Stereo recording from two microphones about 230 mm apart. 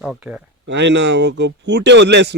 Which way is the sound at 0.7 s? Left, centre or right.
Right.